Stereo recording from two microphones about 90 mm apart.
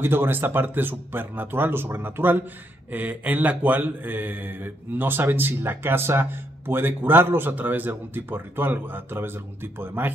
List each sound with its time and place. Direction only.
0.0 s a man's voice: 25° right (ahead or behind)